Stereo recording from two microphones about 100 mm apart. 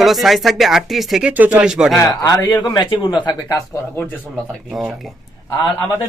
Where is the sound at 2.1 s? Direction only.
35° left (ahead or behind).